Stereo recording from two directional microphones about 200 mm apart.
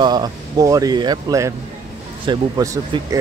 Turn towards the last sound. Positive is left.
turn(degrees=-15)  # may be behind; listen again after turning